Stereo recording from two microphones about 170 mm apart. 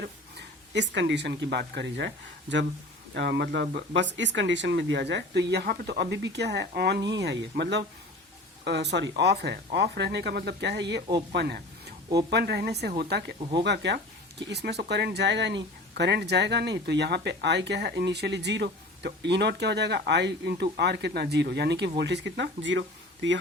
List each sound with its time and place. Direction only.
0.7 s speech: 90° right
3.2 s speech: 75° right (ahead or behind)
7.1 s speech: 85° right
11.3 s speech: 70° right (ahead or behind); by 22.8 s 90° right